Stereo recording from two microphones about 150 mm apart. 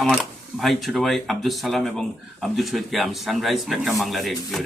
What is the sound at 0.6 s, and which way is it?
Speech, centre (ahead or behind).